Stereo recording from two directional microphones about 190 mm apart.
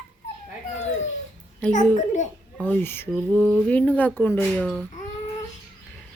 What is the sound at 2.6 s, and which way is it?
Speech, 10° left (ahead or behind).